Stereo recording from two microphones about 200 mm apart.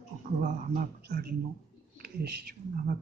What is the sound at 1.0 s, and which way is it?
Speech, 50° right (ahead or behind).